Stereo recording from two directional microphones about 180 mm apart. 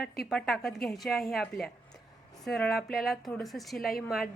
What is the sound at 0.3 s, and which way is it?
A woman's voice, 5° left (ahead or behind).